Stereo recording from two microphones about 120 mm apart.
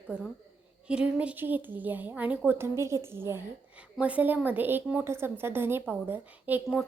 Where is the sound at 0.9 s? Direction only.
10° right (ahead or behind).